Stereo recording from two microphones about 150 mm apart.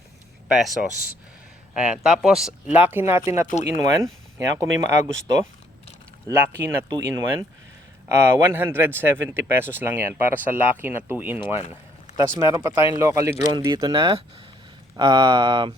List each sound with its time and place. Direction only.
0.4 s speech: 5° right (ahead or behind); by 4.9 s 20° right (ahead or behind)
6.2 s speech: 15° right (ahead or behind)
11.3 s speech: 45° left (ahead or behind)
12.1 s speech: 20° right (ahead or behind)